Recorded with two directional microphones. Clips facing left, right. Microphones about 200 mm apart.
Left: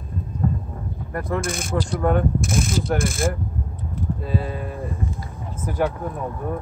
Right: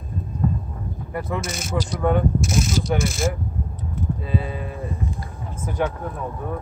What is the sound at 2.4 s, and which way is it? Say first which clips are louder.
Speech: even; 55° left (ahead or behind).